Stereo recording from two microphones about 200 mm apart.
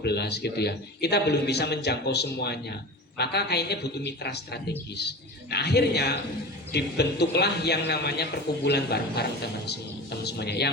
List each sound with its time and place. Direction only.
0.0 s a man's voice: 55° left (ahead or behind)